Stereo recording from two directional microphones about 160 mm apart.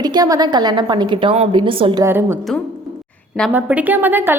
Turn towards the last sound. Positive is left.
turn(degrees=-10)  # may be behind; listen again after turning